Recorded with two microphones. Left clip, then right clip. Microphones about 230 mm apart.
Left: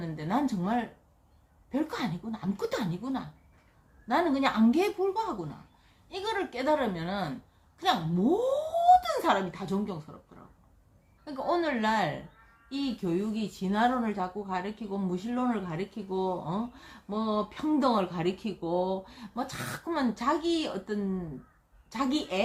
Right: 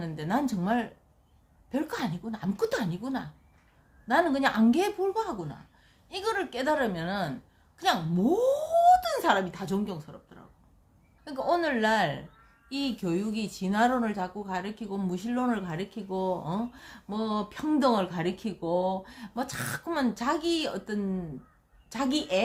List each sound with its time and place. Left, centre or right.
0.0 s speech: right
11.3 s speech: right